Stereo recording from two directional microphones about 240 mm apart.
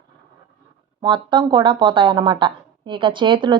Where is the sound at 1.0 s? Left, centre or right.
Centre.